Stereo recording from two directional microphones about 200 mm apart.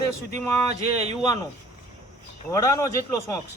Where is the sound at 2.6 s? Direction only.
15° left (ahead or behind).